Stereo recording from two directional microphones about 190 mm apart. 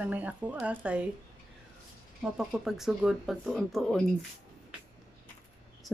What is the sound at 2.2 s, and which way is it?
Speech, centre (ahead or behind).